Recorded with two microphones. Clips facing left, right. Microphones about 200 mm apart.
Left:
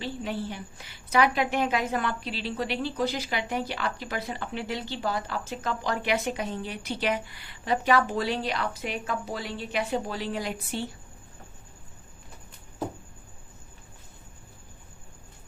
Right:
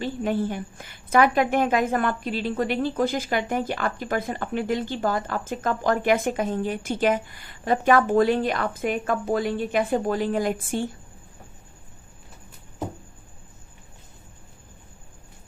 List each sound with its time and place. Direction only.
0.0 s a woman's voice: 50° right (ahead or behind)